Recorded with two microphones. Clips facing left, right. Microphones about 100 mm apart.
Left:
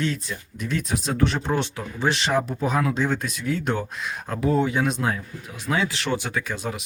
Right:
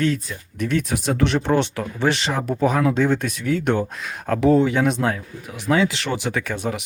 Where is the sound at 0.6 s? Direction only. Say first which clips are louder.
Right 5 dB; 65° right (ahead or behind).